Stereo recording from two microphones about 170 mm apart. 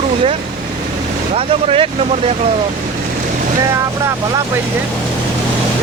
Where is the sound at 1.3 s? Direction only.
35° right (ahead or behind).